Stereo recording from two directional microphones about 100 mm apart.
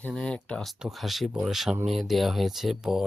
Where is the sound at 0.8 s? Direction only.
Centre (ahead or behind).